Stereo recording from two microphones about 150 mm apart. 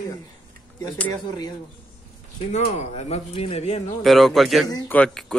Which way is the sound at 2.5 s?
50° left (ahead or behind).